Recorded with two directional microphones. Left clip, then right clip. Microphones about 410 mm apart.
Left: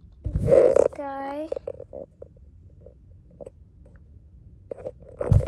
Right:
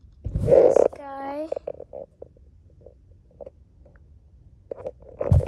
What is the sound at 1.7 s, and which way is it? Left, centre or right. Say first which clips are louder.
Stomach rumble: right 1 dB; centre.